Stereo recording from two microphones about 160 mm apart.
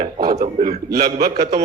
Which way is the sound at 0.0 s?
70° right (ahead or behind).